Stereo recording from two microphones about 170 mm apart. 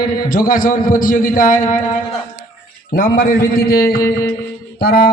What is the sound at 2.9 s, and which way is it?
A man's voice, 55° left (ahead or behind).